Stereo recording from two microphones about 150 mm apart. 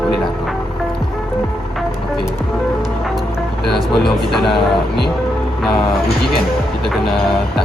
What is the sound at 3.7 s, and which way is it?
Speech, centre (ahead or behind).